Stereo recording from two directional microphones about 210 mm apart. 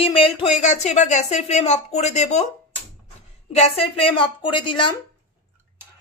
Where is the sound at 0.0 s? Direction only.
25° left (ahead or behind).